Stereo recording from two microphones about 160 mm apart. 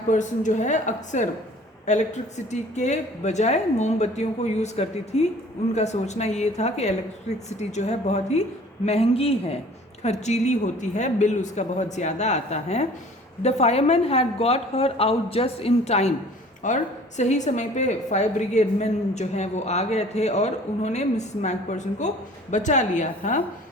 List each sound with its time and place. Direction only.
0.1 s a woman's voice: 50° left (ahead or behind)